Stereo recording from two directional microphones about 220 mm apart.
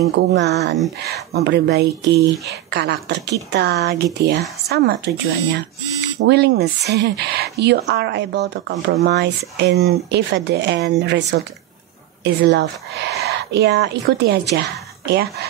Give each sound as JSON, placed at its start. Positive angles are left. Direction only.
{"t": 0.0, "sound": "speech", "side_deg": -50}